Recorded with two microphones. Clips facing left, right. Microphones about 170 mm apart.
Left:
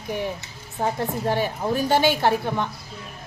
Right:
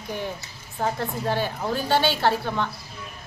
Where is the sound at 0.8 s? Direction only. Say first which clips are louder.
Left 2 dB; 15° left (ahead or behind).